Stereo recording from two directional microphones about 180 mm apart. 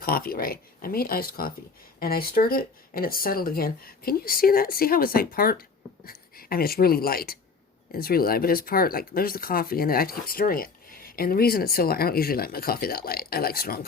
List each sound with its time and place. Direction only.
0.0 s speech: 55° left (ahead or behind)